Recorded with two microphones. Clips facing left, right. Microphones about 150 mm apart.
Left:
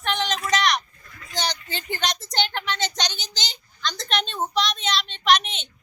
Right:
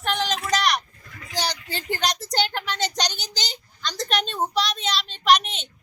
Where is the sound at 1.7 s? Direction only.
35° right (ahead or behind).